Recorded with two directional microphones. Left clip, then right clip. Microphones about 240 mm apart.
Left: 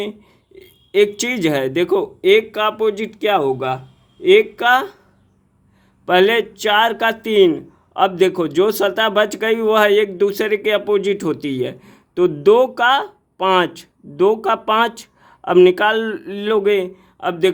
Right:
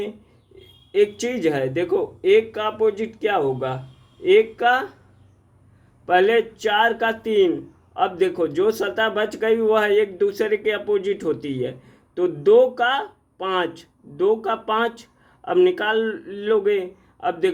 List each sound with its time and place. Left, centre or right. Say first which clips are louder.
0.6 s speech: left 4 dB; left
6.1 s speech: left 3 dB; left